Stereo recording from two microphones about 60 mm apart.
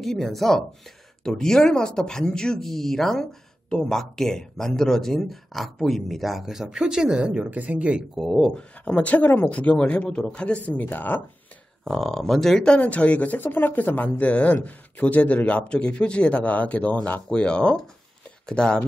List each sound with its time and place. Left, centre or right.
0.0 s speech: centre
7.5 s speech: right
8.3 s speech: centre
8.8 s speech: left
11.8 s speech: centre